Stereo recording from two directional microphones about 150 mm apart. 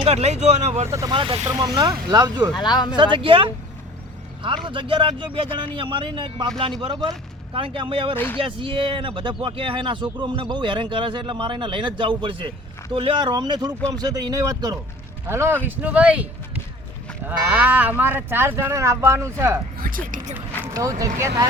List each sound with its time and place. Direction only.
0.0 s speech: 45° right (ahead or behind)
0.9 s speech: 20° right (ahead or behind)
1.1 s speech: 35° right (ahead or behind)
2.6 s speech: 30° left (ahead or behind)
2.9 s speech: 30° right (ahead or behind)
8.1 s speech: 15° left (ahead or behind)
8.4 s speech: 35° right (ahead or behind); by 16.2 s 10° right (ahead or behind)
17.2 s speech: 10° right (ahead or behind)
19.8 s speech: 65° right (ahead or behind)
21.0 s speech: 25° right (ahead or behind)